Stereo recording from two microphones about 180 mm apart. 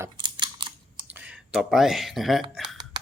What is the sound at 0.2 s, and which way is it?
Computer keyboard, 25° right (ahead or behind).